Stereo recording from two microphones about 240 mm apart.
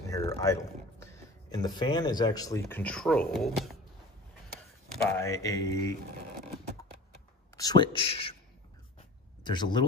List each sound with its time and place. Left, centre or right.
0.1 s speech: centre
5.1 s mantra: centre
7.5 s a man's voice: centre
9.4 s speech: centre